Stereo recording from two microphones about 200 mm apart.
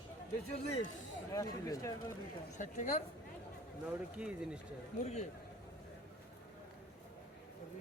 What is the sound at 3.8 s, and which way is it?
Speech, 5° right (ahead or behind).